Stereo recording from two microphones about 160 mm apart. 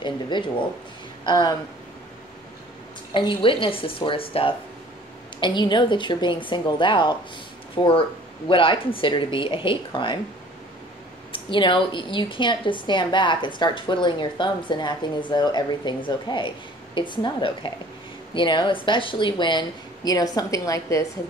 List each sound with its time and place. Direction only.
0.0 s a woman's voice: 30° left (ahead or behind)
3.1 s a woman's voice: 30° left (ahead or behind)
11.3 s a woman's voice: 30° left (ahead or behind)